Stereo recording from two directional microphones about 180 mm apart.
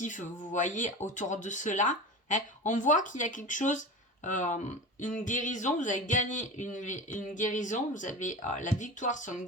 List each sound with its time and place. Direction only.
0.0 s speech: 45° left (ahead or behind)